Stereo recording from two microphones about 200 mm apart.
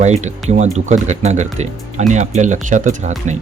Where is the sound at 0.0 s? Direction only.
35° right (ahead or behind).